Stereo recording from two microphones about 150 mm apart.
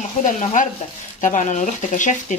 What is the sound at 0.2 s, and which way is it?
Speech, 55° left (ahead or behind).